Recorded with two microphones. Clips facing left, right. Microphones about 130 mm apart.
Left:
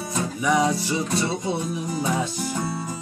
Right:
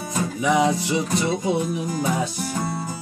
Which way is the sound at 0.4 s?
15° right (ahead or behind).